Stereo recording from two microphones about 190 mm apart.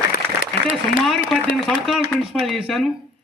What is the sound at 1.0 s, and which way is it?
A man's voice, centre (ahead or behind).